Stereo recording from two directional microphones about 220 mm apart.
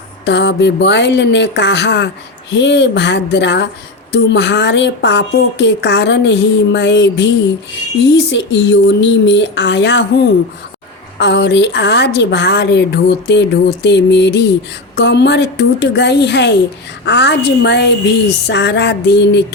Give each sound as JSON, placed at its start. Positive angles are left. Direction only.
{"t": 0.3, "sound": "a woman's voice", "side_deg": 50}
{"t": 11.2, "sound": "a woman's voice", "side_deg": 50}